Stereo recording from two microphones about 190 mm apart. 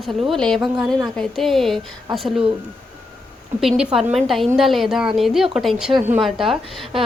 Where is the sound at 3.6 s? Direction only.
Centre (ahead or behind).